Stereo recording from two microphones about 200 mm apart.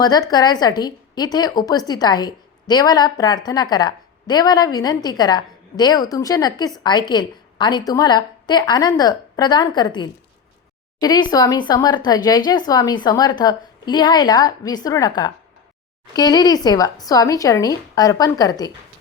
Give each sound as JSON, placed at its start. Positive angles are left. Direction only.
{"t": 0.0, "sound": "speech", "side_deg": 20}